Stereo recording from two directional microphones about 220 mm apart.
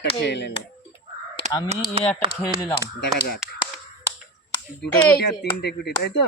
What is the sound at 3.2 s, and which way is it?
Speech, 45° left (ahead or behind).